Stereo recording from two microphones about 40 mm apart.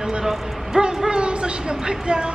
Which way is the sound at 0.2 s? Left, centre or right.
Centre.